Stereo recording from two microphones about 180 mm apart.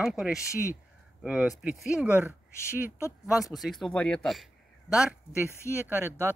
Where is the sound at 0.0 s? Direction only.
Centre (ahead or behind).